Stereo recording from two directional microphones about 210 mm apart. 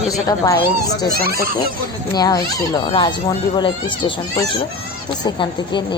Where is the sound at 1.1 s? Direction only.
45° right (ahead or behind).